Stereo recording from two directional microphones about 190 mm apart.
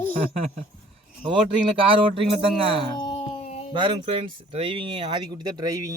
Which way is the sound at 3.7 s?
25° right (ahead or behind).